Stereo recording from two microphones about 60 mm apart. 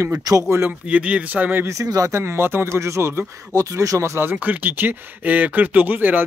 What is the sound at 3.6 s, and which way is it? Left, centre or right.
Speech, right.